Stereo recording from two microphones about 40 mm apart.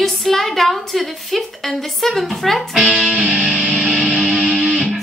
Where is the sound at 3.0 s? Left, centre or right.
Right.